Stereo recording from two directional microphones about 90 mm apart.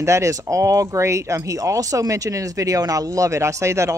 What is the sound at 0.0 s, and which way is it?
Speech, 35° right (ahead or behind).